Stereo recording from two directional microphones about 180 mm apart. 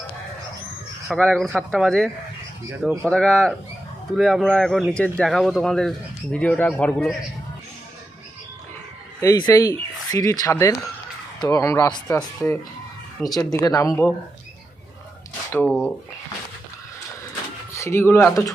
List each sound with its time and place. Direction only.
1.0 s a man's voice: centre (ahead or behind)
9.2 s a man's voice: 20° left (ahead or behind)
12.4 s speech: 5° left (ahead or behind)
13.3 s speech: 20° left (ahead or behind)
15.5 s a man's voice: 10° left (ahead or behind)
17.7 s speech: 15° left (ahead or behind)